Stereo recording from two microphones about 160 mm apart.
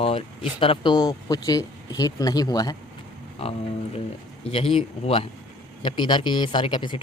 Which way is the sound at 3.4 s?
40° left (ahead or behind).